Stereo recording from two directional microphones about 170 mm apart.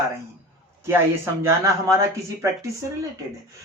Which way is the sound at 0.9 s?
15° right (ahead or behind).